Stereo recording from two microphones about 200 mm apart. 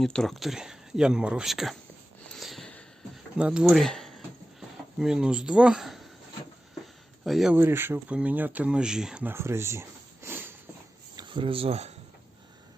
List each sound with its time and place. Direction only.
0.0 s speech: centre (ahead or behind)
2.3 s a sound: centre (ahead or behind)
3.3 s speech: 5° right (ahead or behind)
7.3 s speech: centre (ahead or behind)
11.2 s speech: 25° right (ahead or behind)